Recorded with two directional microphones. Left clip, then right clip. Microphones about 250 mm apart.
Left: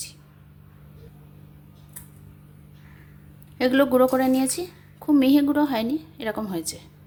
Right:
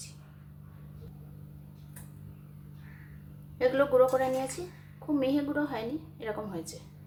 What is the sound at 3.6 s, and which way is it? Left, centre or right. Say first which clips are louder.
A woman's voice: left 5 dB; left.